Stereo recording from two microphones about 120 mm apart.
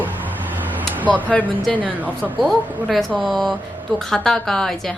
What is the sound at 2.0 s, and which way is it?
Speech, 15° right (ahead or behind).